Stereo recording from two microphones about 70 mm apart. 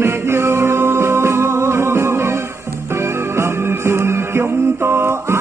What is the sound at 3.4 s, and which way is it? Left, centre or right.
Music, right.